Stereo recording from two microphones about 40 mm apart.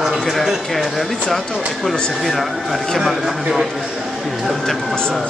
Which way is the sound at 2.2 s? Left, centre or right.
Centre.